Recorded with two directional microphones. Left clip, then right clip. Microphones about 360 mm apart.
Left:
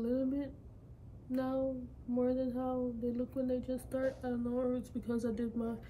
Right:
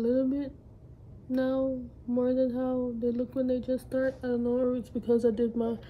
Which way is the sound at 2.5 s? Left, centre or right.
Right.